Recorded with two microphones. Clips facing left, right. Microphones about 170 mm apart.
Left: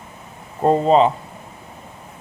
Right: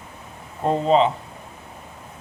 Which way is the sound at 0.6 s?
45° left (ahead or behind).